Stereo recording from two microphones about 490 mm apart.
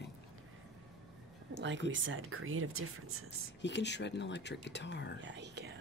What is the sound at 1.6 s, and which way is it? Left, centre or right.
Speech, right.